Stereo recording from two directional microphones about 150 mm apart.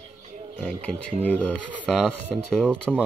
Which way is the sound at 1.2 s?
10° left (ahead or behind).